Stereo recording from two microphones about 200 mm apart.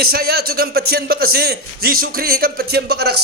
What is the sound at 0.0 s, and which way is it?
A man's voice, 50° right (ahead or behind).